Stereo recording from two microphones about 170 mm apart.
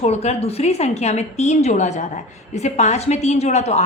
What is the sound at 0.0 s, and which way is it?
A woman's voice, 40° left (ahead or behind).